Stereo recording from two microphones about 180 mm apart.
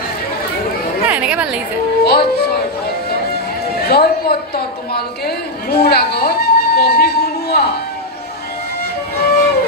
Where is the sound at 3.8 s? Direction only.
60° left (ahead or behind).